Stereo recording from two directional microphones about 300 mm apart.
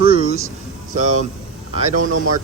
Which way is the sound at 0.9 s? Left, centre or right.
Right.